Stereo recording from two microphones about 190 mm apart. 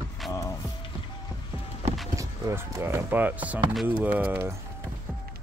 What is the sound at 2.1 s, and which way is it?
Speech, 15° right (ahead or behind).